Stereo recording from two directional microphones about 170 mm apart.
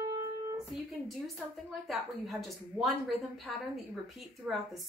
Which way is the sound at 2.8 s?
Centre (ahead or behind).